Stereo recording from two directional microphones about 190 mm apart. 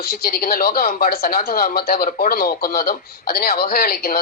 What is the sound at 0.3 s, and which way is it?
Speech, 50° left (ahead or behind).